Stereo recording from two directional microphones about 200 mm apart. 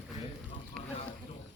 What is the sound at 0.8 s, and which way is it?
Vehicle, 5° left (ahead or behind).